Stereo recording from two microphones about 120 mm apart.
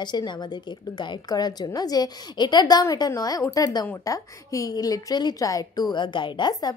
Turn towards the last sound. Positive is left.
turn(degrees=40)  # may be behind; listen again after turning